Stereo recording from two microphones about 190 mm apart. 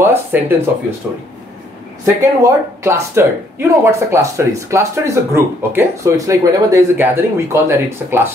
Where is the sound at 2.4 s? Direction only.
15° right (ahead or behind).